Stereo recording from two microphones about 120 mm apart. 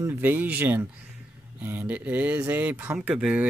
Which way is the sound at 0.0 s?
15° right (ahead or behind).